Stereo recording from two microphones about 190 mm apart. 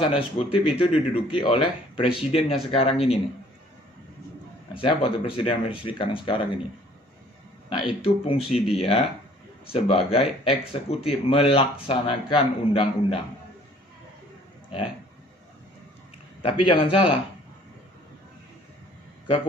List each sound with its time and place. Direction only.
0.0 s speech: 30° left (ahead or behind)
4.7 s speech: 25° left (ahead or behind)
7.7 s speech: 30° left (ahead or behind)
16.4 s speech: 25° left (ahead or behind)